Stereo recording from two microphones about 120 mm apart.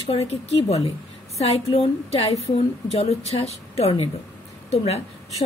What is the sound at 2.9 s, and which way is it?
A woman's voice, 55° left (ahead or behind).